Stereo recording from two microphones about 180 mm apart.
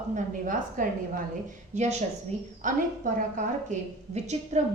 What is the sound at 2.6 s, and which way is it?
A woman's voice, 45° right (ahead or behind).